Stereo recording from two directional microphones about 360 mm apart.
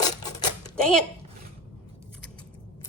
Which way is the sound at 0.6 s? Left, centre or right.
Centre.